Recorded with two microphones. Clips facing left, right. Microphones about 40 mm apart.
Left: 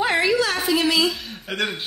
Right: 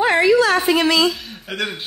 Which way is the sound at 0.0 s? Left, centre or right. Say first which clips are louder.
Right 4 dB; right.